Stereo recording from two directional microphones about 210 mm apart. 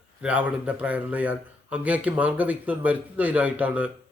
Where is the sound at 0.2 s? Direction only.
5° right (ahead or behind).